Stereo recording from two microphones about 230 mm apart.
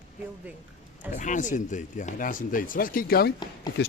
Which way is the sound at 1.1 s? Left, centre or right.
Left.